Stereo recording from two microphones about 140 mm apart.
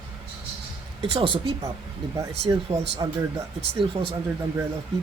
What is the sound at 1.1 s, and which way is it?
Speech, 40° right (ahead or behind).